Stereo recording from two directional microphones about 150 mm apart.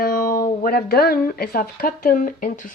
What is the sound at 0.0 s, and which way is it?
Speech, 70° left (ahead or behind).